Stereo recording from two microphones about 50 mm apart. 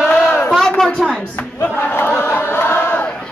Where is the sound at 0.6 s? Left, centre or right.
Centre.